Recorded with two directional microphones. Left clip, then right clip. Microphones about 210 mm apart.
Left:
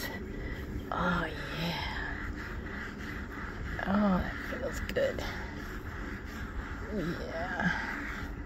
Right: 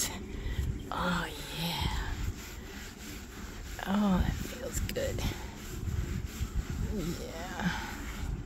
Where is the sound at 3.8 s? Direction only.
30° right (ahead or behind).